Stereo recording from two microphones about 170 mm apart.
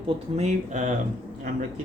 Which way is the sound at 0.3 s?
45° right (ahead or behind).